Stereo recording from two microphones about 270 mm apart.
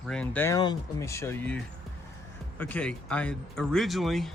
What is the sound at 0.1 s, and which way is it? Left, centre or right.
Speech, centre.